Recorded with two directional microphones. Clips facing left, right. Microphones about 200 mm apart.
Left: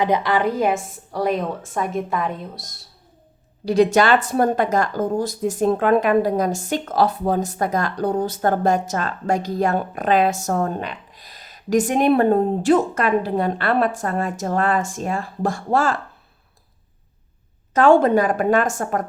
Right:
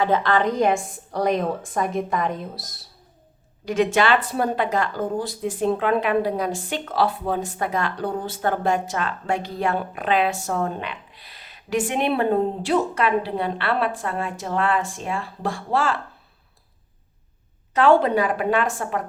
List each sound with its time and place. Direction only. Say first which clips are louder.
0.0 s a woman's voice: left 1 dB; 15° left (ahead or behind); by 2.8 s centre (ahead or behind)
3.7 s speech: left 4 dB; 40° left (ahead or behind)
17.7 s speech: left 3 dB; 45° left (ahead or behind)